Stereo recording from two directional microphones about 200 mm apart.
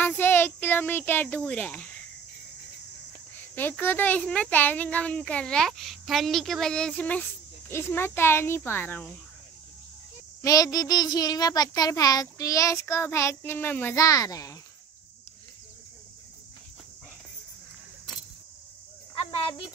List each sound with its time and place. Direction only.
0.0 s a child's voice: 10° left (ahead or behind)
3.5 s a child's voice: 10° left (ahead or behind)
10.4 s a child's voice: 20° left (ahead or behind)